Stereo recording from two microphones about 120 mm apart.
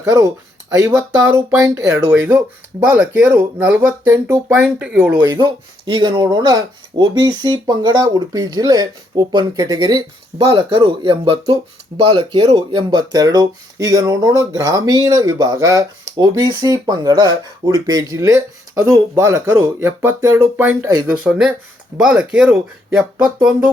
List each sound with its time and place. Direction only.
0.0 s speech: 25° right (ahead or behind)
2.8 s speech: 15° right (ahead or behind)
5.2 s speech: 35° right (ahead or behind); by 23.6 s 5° right (ahead or behind)